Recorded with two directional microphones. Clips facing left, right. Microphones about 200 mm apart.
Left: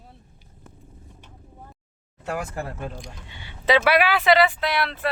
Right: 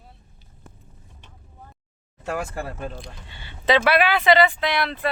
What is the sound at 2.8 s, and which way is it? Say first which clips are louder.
Speech: right 1 dB; 15° left (ahead or behind).